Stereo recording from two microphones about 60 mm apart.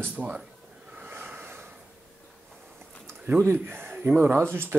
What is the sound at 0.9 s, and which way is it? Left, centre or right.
Snort, right.